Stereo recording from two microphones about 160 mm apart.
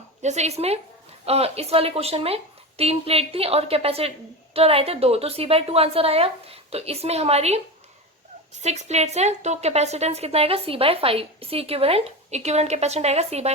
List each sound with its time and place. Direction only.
0.2 s a woman's voice: 45° right (ahead or behind)
8.6 s a woman's voice: 45° right (ahead or behind)